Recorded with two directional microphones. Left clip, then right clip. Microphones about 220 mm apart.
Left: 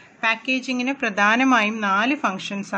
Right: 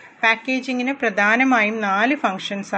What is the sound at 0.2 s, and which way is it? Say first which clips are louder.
A woman's voice: right 3 dB; 15° left (ahead or behind).